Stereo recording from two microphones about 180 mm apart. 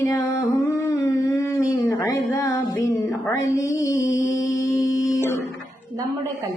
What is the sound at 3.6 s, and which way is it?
Mantra, 20° left (ahead or behind).